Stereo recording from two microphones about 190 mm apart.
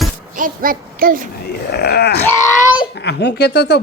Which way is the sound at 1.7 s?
60° left (ahead or behind).